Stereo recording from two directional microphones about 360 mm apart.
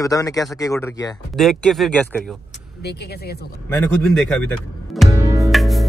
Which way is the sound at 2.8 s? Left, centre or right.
Left.